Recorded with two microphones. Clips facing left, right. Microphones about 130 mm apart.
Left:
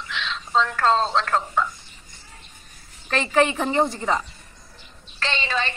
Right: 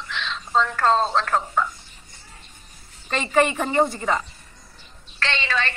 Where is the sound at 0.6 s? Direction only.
5° right (ahead or behind).